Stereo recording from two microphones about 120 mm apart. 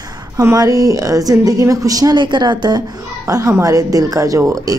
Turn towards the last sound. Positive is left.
turn(degrees=-25)  # may be behind; listen again after turning